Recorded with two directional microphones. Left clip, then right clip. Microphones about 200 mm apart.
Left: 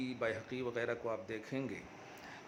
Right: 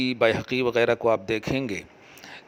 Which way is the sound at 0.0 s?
45° right (ahead or behind).